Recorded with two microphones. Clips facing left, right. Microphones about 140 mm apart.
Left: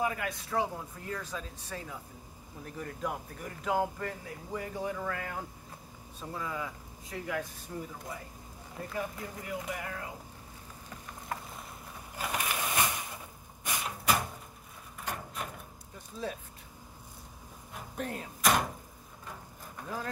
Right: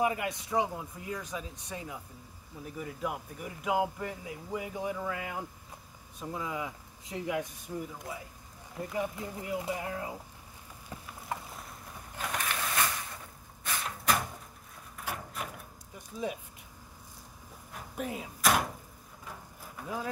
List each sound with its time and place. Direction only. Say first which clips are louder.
0.0 s speech: right 3 dB; 20° right (ahead or behind)
7.7 s speech: right 3 dB; 5° right (ahead or behind)
8.8 s speech: right 3 dB; 20° right (ahead or behind)
11.3 s boat: right 1 dB; 20° right (ahead or behind)
12.2 s a sound: left 1 dB; 10° left (ahead or behind)
16.1 s speech: right 2 dB; 10° right (ahead or behind)
17.7 s door: right 1 dB; 5° right (ahead or behind)
19.2 s a sound: even; 5° right (ahead or behind)